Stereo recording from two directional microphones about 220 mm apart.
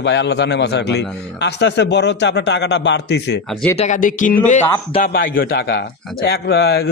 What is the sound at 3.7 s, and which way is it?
A man's voice, 30° left (ahead or behind).